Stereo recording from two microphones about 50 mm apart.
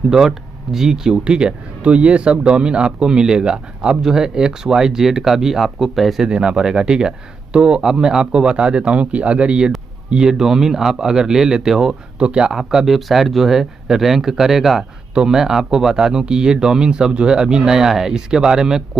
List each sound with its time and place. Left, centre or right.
0.1 s speech: centre
6.2 s speech: centre